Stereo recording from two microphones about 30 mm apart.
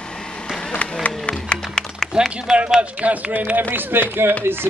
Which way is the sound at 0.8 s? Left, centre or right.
Left.